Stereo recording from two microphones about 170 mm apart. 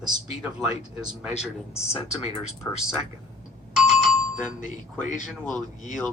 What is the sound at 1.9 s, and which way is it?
Speech, 40° left (ahead or behind).